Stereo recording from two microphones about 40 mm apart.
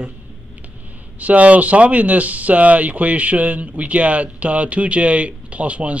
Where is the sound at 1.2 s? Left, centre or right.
Right.